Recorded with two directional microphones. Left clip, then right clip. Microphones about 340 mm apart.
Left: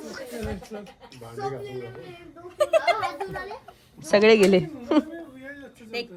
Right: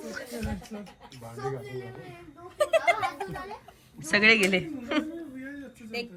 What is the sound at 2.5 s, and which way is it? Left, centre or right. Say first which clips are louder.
A child's voice: left 3 dB; centre.